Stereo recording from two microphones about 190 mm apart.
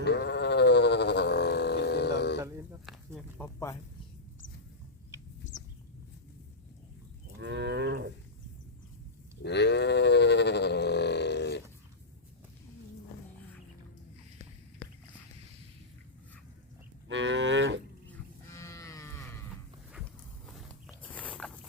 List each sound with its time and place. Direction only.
0.0 s sheep: 65° left (ahead or behind)
2.8 s a sound: centre (ahead or behind)
7.3 s cattle: 65° right (ahead or behind)
9.4 s livestock: 65° left (ahead or behind)
17.1 s cattle: 75° right (ahead or behind)
18.4 s livestock: 15° left (ahead or behind)
20.5 s walk: centre (ahead or behind)